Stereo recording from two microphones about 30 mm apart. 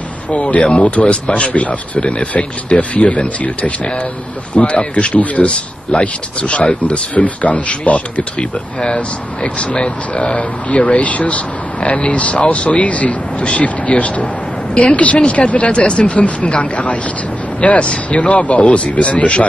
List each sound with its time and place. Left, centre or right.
0.3 s speech: left
2.0 s speech: left
2.3 s speech: left
5.9 s speech: left
7.2 s speech: left
14.7 s a woman's voice: left
15.2 s speech: left